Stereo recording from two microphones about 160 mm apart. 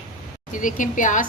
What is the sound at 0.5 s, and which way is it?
Speech, 55° left (ahead or behind).